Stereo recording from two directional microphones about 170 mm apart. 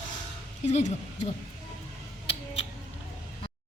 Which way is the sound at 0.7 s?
45° left (ahead or behind).